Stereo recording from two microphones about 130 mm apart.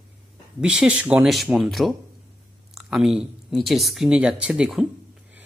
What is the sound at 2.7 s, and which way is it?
Speech, 5° right (ahead or behind).